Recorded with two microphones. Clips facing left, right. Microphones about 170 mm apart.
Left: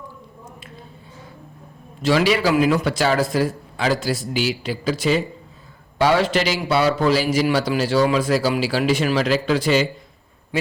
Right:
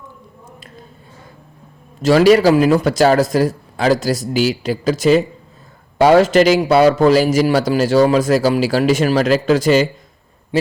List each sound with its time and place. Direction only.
2.0 s a man's voice: 40° right (ahead or behind)